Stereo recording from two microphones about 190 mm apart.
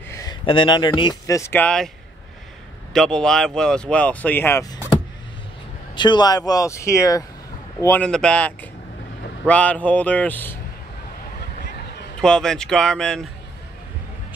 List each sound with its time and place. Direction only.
0.1 s speech: 20° left (ahead or behind)
2.9 s speech: 5° left (ahead or behind)
5.9 s speech: 25° left (ahead or behind)
12.2 s speech: 5° left (ahead or behind)